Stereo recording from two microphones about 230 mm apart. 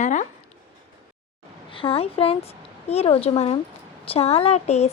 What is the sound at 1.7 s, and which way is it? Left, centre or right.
Speech, left.